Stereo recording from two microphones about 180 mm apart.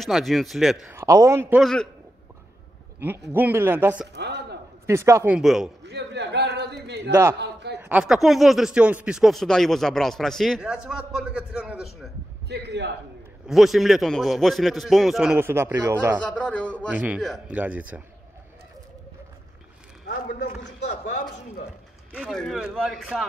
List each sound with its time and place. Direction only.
0.0 s speech: centre (ahead or behind)
0.8 s speech: 15° right (ahead or behind)
1.6 s speech: 5° left (ahead or behind)
3.0 s speech: 10° right (ahead or behind)
4.1 s a sound: 70° right (ahead or behind)
4.8 s speech: 15° right (ahead or behind)
5.9 s a sound: 70° right (ahead or behind)
7.8 s speech: 5° right (ahead or behind)
12.4 s a man's voice: 70° right (ahead or behind)
13.5 s speech: centre (ahead or behind)
16.3 s speech: 5° left (ahead or behind)
16.9 s speech: 10° right (ahead or behind)
20.8 s a sound: 45° left (ahead or behind)
22.1 s speech: centre (ahead or behind)